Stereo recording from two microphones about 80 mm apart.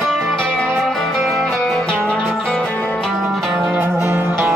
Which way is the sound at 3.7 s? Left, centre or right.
Right.